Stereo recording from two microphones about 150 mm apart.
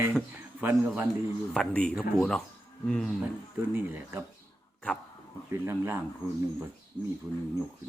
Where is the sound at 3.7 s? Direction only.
15° right (ahead or behind).